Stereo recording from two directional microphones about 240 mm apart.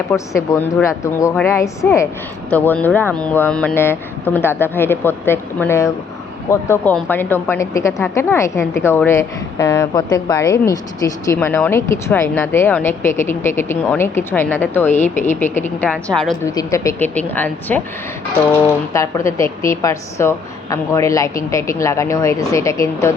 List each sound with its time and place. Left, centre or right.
0.1 s a woman's voice: centre
14.9 s a woman's voice: left
15.5 s a woman's voice: centre
16.5 s a woman's voice: centre
18.9 s a woman's voice: centre